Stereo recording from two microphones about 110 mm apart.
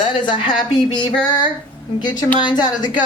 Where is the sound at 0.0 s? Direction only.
50° left (ahead or behind).